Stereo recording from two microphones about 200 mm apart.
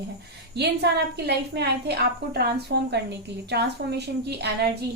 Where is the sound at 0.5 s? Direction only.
55° right (ahead or behind).